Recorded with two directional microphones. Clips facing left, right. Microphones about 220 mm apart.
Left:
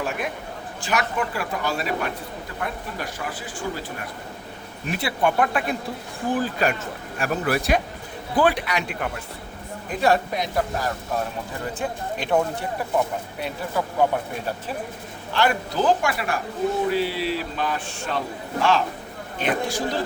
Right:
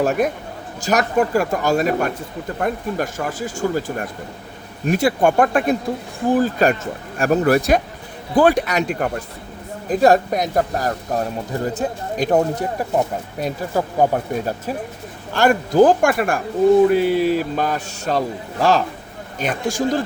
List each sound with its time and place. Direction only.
0.0 s speech: 40° right (ahead or behind)
19.4 s speech: 45° right (ahead or behind)